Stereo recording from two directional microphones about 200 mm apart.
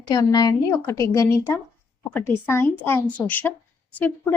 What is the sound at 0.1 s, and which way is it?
A woman's voice, 20° left (ahead or behind).